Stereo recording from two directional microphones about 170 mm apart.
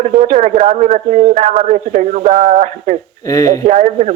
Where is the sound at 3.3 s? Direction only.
20° left (ahead or behind).